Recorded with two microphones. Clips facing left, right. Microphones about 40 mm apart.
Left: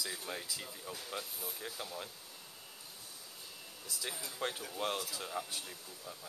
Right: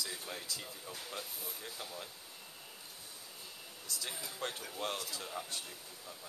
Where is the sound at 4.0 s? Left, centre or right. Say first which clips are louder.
Left 2 dB; centre.